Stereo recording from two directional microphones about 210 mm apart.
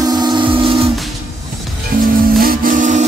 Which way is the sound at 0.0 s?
20° right (ahead or behind).